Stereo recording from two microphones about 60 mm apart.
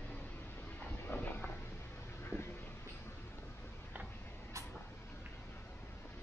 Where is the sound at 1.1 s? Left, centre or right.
Left.